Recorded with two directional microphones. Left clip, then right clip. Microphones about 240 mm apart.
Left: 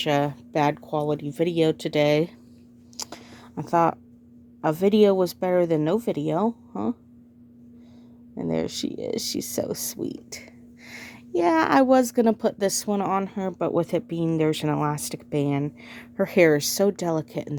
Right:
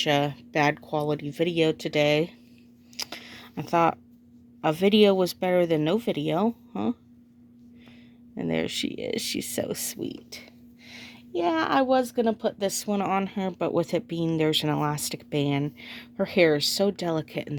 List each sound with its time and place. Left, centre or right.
0.0 s speech: centre
3.0 s a sound: centre
4.6 s speech: centre
8.4 s a woman's voice: centre